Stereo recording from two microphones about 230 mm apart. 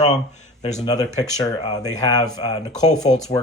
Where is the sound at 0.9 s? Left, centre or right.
Centre.